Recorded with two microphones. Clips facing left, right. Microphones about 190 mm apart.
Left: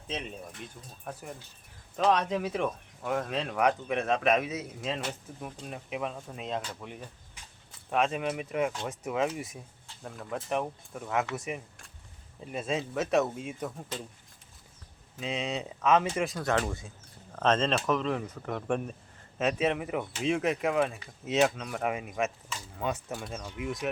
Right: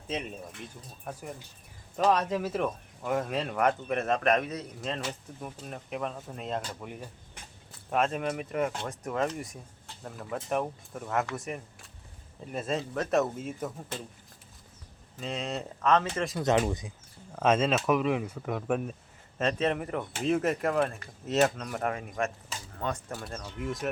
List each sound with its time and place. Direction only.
0.1 s speech: 10° right (ahead or behind)
2.0 s speech: 5° right (ahead or behind)
15.2 s speech: centre (ahead or behind)
16.0 s speech: 10° left (ahead or behind)
16.4 s speech: 20° right (ahead or behind)
19.4 s speech: 5° left (ahead or behind)